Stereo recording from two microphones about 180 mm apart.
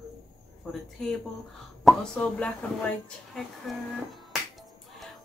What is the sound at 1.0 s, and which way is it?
Speech, 5° left (ahead or behind).